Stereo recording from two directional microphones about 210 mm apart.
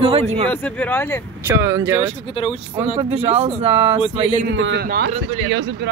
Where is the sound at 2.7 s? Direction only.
25° right (ahead or behind).